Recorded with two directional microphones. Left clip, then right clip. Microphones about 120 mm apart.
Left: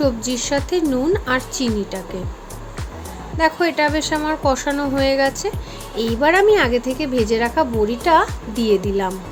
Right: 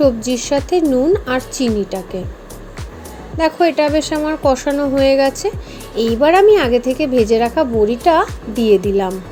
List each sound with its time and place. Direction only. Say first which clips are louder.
0.0 s a woman's voice: right 5 dB; 15° right (ahead or behind)
3.3 s speech: right 3 dB; 20° right (ahead or behind)